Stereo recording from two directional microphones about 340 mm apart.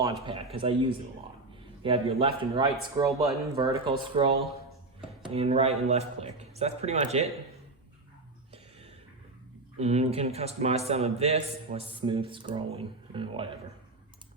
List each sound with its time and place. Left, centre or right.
0.0 s a man's voice: centre
4.4 s a sound: centre
5.2 s a man's voice: centre
9.7 s a man's voice: centre